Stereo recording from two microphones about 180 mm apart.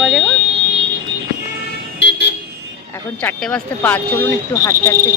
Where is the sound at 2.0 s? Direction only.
75° left (ahead or behind).